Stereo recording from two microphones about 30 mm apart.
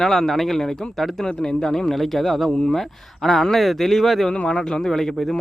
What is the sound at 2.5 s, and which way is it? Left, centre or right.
Speech, left.